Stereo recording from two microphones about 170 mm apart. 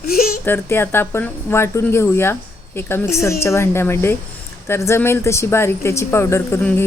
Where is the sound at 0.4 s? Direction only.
15° left (ahead or behind).